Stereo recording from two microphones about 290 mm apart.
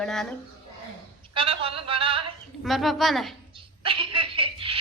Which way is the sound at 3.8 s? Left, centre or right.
Centre.